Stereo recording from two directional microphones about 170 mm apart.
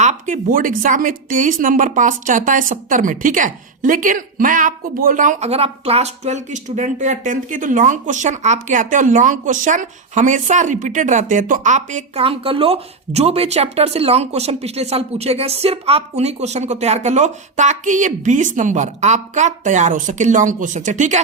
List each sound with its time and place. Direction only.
0.0 s a woman's voice: 45° right (ahead or behind)